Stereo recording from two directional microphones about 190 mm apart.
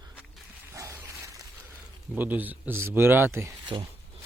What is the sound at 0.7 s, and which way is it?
Dog, 15° right (ahead or behind).